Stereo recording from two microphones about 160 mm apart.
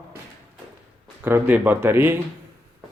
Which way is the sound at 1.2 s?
10° right (ahead or behind).